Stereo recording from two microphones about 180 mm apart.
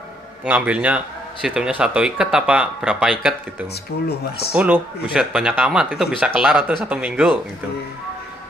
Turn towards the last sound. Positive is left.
turn(degrees=-5)  # may be behind; listen again after turning